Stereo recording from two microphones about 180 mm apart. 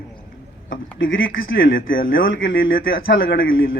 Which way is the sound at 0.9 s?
90° left.